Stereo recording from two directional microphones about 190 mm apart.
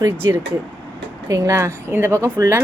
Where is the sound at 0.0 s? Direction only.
15° right (ahead or behind).